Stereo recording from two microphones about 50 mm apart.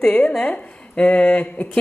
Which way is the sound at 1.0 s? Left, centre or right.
Left.